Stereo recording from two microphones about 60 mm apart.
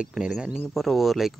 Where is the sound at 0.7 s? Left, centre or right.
Centre.